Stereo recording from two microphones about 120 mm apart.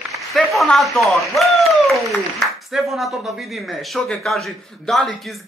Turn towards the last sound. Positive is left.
turn(degrees=0)  # may be behind; listen again after turning